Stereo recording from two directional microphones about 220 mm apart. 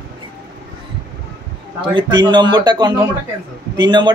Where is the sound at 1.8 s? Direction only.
20° right (ahead or behind).